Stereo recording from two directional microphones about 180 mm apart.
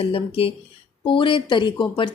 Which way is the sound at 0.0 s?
30° left (ahead or behind).